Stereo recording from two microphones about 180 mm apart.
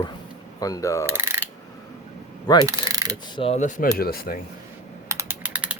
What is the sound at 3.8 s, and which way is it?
Speech, 55° left (ahead or behind).